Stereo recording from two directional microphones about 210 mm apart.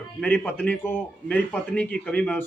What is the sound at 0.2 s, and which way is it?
A man's voice, 5° left (ahead or behind).